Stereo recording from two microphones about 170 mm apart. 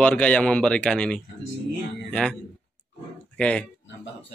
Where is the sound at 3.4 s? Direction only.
5° left (ahead or behind).